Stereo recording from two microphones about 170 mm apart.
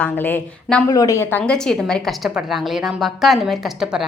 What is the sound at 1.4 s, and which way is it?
A woman's voice, 5° left (ahead or behind).